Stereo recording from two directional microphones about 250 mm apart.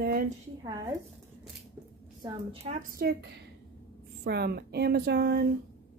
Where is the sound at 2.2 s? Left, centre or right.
Right.